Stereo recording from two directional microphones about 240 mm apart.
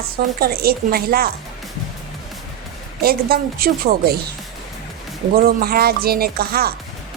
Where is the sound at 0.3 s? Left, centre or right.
Right.